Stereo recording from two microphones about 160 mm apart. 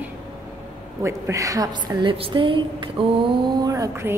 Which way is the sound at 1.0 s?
20° right (ahead or behind).